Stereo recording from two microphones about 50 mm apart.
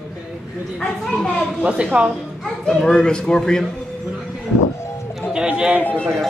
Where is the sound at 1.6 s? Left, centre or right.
Right.